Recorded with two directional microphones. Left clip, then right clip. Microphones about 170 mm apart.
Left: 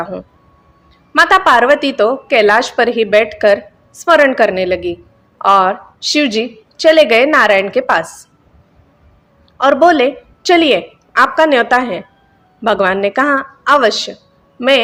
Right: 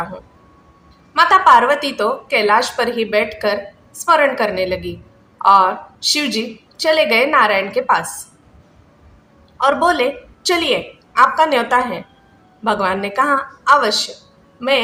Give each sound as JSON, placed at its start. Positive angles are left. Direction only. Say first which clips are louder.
{"t": 1.1, "sound": "a woman's voice", "louder": "left 1 dB", "side_deg": 45}
{"t": 9.6, "sound": "a woman's voice", "louder": "left 5 dB", "side_deg": 45}